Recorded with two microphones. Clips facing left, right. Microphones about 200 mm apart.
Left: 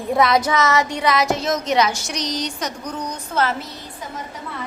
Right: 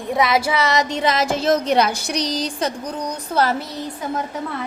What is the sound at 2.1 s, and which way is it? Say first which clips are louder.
Speech: right 3 dB; 30° right (ahead or behind).